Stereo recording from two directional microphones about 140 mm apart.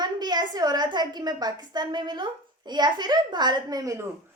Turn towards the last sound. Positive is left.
turn(degrees=-25)  # may be behind; listen again after turning